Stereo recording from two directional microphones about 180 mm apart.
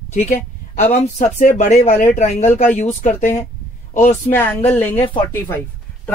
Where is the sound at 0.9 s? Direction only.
40° left (ahead or behind).